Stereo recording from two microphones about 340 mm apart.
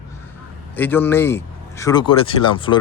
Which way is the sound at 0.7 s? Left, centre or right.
Centre.